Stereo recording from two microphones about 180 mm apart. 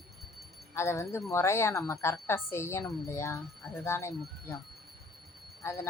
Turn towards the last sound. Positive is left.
turn(degrees=15)  # may be behind; listen again after turning